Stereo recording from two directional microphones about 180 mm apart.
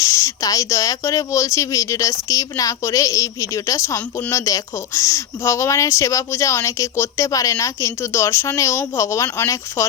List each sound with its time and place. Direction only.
0.0 s speech: 15° left (ahead or behind)